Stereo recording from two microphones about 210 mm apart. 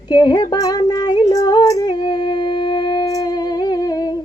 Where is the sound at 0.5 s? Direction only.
15° left (ahead or behind).